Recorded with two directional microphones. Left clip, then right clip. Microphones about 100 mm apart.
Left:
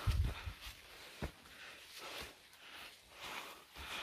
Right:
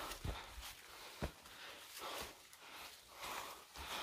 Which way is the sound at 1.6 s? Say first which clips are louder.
Right 1 dB; 40° right (ahead or behind).